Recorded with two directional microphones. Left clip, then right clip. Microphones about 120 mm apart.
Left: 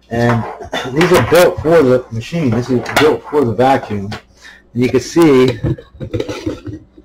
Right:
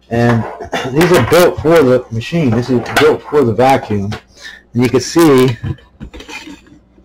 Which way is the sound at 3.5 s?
40° right (ahead or behind).